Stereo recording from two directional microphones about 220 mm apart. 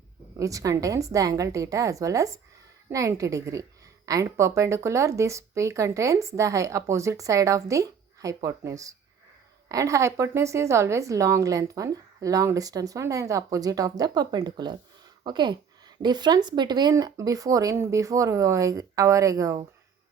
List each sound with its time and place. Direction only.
0.3 s a woman's voice: 15° right (ahead or behind)